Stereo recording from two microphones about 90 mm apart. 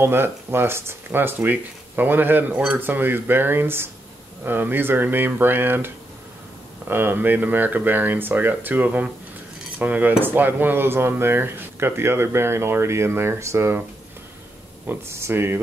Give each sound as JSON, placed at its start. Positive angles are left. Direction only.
{"t": 0.0, "sound": "speech", "side_deg": -25}
{"t": 6.9, "sound": "speech", "side_deg": -25}
{"t": 14.9, "sound": "speech", "side_deg": -30}